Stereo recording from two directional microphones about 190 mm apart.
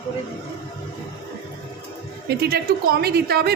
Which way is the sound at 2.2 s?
55° right (ahead or behind).